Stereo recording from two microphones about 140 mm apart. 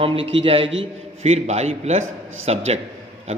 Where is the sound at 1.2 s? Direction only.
50° right (ahead or behind).